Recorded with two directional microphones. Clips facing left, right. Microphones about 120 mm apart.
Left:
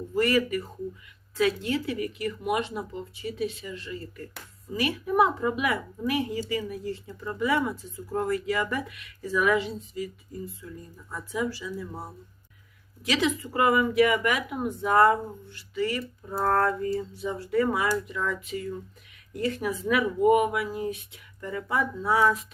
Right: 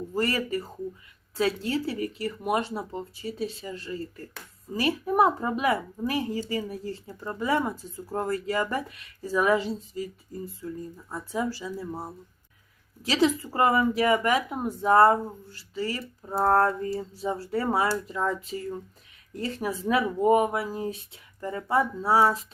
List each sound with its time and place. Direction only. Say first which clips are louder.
0.1 s speech: left 4 dB; 35° right (ahead or behind)
11.1 s speech: even; 35° right (ahead or behind)
13.1 s speech: right 3 dB; 35° right (ahead or behind)